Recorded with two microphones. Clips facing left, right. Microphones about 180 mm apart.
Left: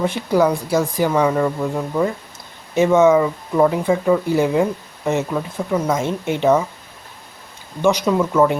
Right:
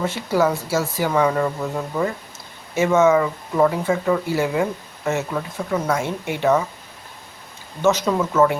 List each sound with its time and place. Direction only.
0.0 s speech: 15° left (ahead or behind)
7.8 s speech: 15° left (ahead or behind)